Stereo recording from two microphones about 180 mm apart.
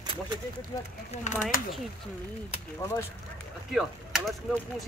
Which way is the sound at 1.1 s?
45° left (ahead or behind).